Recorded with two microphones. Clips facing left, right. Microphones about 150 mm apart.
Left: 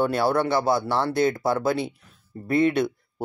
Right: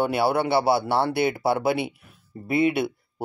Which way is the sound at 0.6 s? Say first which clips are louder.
Right 1 dB; 70° right (ahead or behind).